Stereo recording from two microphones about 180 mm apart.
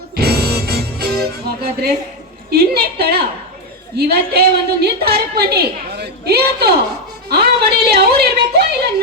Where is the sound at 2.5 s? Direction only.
60° right (ahead or behind).